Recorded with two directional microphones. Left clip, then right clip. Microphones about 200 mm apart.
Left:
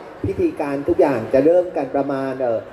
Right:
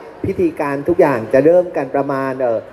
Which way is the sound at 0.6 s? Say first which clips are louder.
Right 4 dB; 15° right (ahead or behind).